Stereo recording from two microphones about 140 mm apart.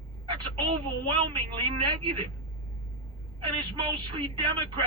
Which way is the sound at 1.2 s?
35° right (ahead or behind).